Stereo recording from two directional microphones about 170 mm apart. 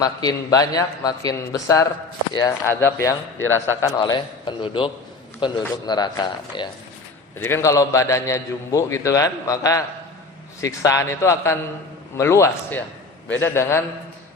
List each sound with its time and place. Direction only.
0.2 s a man's voice: 20° left (ahead or behind)
7.3 s a man's voice: 15° left (ahead or behind)